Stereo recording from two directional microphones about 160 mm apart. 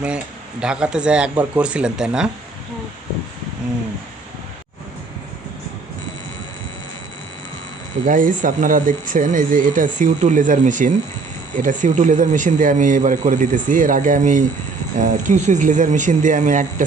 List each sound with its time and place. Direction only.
0.6 s speech: 5° right (ahead or behind)
8.0 s speech: 55° right (ahead or behind)